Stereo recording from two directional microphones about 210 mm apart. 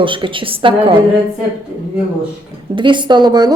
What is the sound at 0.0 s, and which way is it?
Speech, 25° right (ahead or behind).